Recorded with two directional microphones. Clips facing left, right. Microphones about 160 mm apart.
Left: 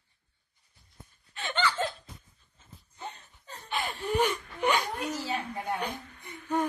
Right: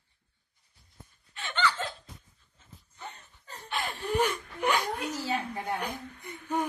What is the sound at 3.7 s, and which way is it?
Gasp, centre (ahead or behind).